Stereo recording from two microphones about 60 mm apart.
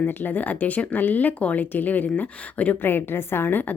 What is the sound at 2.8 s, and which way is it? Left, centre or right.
Speech, left.